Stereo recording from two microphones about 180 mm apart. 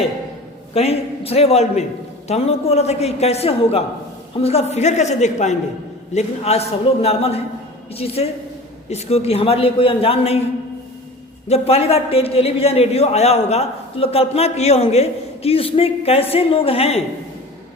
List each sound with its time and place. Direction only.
0.7 s a man's voice: 35° left (ahead or behind)
11.4 s a man's voice: 35° left (ahead or behind)